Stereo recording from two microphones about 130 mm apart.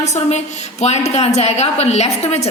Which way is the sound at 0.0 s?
60° left (ahead or behind).